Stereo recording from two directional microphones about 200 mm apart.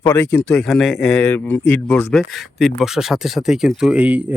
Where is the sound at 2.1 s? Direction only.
Centre (ahead or behind).